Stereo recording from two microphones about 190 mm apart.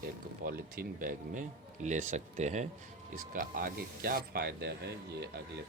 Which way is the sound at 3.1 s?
50° right (ahead or behind).